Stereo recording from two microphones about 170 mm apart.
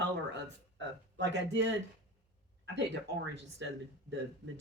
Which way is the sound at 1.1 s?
90° right.